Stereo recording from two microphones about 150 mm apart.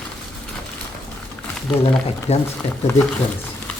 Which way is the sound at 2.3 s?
45° left (ahead or behind).